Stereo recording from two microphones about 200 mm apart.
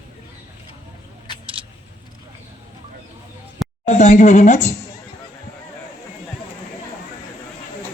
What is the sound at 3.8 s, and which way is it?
Speech, 35° left (ahead or behind).